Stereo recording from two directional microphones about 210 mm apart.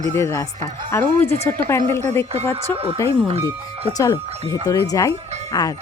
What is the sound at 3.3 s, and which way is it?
Speech, 30° right (ahead or behind).